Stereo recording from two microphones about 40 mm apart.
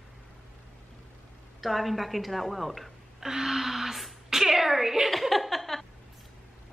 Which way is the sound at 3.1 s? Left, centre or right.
Centre.